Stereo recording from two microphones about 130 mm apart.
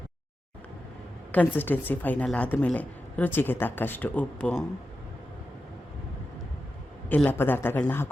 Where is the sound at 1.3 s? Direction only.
15° left (ahead or behind).